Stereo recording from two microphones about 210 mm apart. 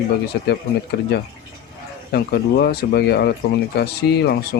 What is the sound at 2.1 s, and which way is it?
Speech, 50° left (ahead or behind).